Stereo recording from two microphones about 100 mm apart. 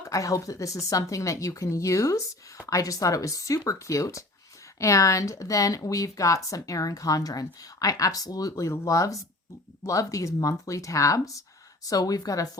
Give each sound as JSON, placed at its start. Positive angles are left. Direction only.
{"t": 0.0, "sound": "speech", "side_deg": 35}